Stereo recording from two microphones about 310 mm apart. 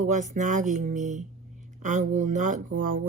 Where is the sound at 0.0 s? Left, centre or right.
Right.